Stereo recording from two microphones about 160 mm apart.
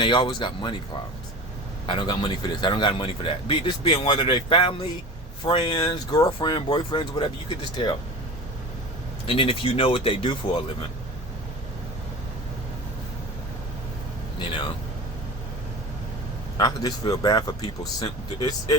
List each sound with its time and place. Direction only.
0.0 s speech: 30° left (ahead or behind)
1.9 s a man's voice: 30° left (ahead or behind)
9.2 s a man's voice: 35° left (ahead or behind)
14.3 s speech: 30° left (ahead or behind)
16.6 s speech: 25° left (ahead or behind)